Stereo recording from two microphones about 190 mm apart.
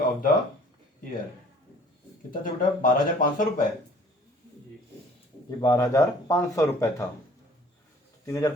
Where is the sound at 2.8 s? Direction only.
45° left (ahead or behind).